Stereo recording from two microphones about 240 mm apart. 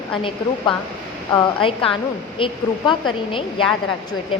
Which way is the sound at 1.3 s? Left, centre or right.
Centre.